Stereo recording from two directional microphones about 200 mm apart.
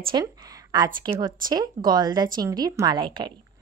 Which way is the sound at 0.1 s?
20° right (ahead or behind).